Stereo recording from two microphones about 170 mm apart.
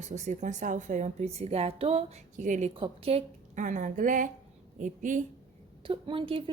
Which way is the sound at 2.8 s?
35° right (ahead or behind).